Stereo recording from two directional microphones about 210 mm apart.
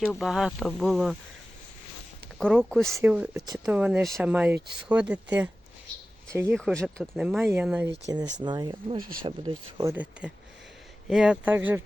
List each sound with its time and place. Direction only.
0.0 s speech: centre (ahead or behind)
2.4 s speech: 5° left (ahead or behind)
6.5 s speech: centre (ahead or behind)
8.1 s speech: 20° right (ahead or behind)
9.9 s speech: 5° right (ahead or behind)